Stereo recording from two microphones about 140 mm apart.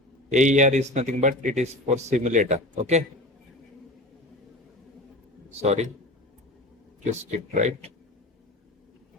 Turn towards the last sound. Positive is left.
turn(degrees=-60)  # may be behind; listen again after turning